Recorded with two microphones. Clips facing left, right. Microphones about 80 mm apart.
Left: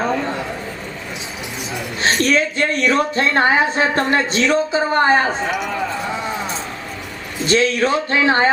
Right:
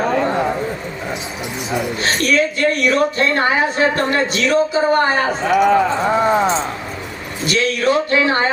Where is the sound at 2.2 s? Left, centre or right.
Left.